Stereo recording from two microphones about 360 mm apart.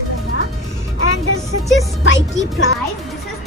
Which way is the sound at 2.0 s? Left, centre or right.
Left.